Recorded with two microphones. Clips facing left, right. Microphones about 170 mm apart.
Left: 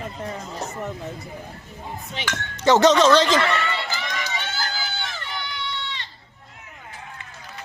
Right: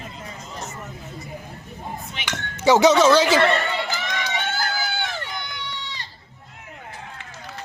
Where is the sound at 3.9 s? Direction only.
55° right (ahead or behind).